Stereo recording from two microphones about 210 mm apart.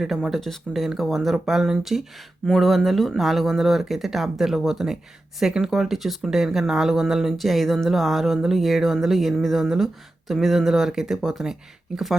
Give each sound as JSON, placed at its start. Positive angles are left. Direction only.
{"t": 0.0, "sound": "speech", "side_deg": 0}